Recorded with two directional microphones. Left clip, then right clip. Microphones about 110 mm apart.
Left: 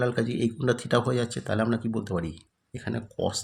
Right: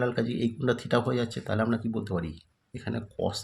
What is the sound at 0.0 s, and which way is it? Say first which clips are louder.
Speech: left 2 dB; 30° left (ahead or behind).